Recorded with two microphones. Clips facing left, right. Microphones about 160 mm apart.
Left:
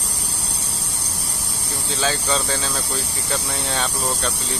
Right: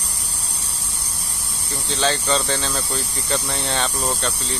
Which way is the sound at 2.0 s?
5° left (ahead or behind).